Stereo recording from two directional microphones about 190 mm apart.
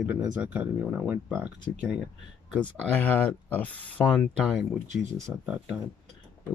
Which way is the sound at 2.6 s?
10° left (ahead or behind).